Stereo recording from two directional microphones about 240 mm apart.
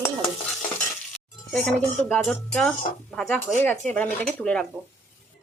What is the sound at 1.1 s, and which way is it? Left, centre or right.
Speech, centre.